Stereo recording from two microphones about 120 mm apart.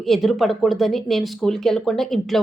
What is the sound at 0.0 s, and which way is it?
Speech, centre (ahead or behind).